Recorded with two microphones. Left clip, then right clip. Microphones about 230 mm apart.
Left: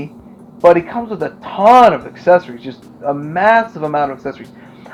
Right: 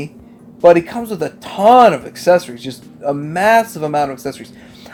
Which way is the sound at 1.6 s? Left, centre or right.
Right.